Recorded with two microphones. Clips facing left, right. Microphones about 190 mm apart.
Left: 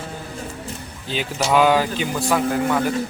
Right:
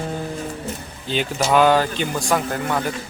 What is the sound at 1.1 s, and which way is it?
A man's voice, 5° left (ahead or behind).